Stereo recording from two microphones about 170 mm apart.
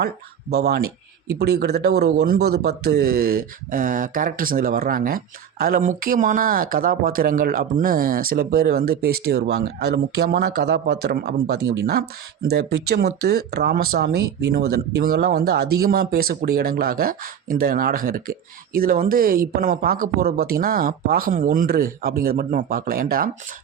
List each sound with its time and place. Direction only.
0.5 s a man's voice: 65° right (ahead or behind)